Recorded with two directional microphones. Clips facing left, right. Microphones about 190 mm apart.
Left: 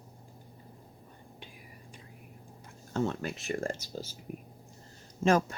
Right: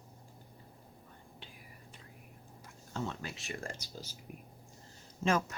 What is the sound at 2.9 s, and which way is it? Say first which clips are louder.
Speech: left 8 dB; 50° left (ahead or behind).